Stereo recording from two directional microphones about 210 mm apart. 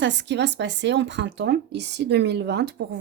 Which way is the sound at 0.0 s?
55° right (ahead or behind).